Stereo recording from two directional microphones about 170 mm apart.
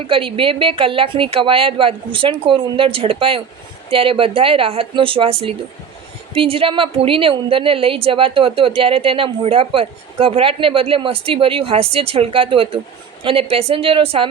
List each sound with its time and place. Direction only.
0.1 s a woman's voice: 30° right (ahead or behind)